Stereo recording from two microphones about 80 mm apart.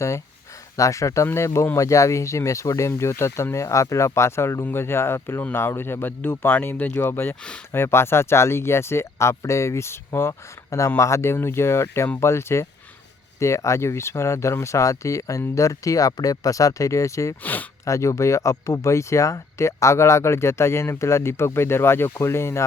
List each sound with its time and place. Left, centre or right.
0.8 s speech: left
17.4 s speech: left
17.8 s speech: left